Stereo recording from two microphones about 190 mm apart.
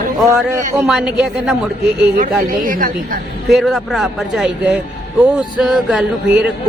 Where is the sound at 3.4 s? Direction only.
Centre (ahead or behind).